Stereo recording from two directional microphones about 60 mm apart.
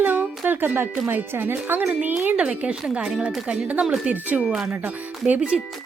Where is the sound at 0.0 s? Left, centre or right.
Right.